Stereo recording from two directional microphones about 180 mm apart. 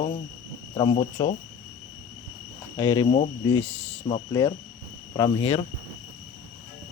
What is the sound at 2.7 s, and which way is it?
Speech, 25° left (ahead or behind).